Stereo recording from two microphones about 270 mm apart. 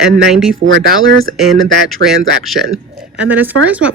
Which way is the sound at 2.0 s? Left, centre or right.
Right.